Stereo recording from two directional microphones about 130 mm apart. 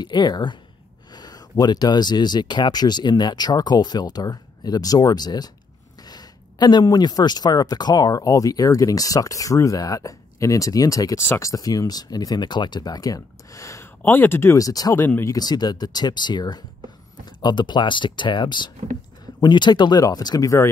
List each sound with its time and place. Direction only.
0.0 s speech: 35° left (ahead or behind)
15.0 s speech: 15° left (ahead or behind)
15.3 s speech: 30° left (ahead or behind)